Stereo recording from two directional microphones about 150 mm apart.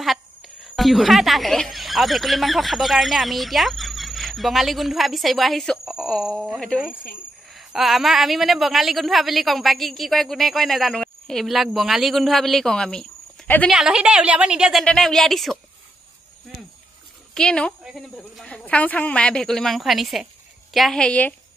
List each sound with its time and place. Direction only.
0.0 s speech: centre (ahead or behind)
7.5 s a woman's voice: centre (ahead or behind)
13.7 s a woman's voice: 5° right (ahead or behind)
17.3 s a woman's voice: 5° left (ahead or behind)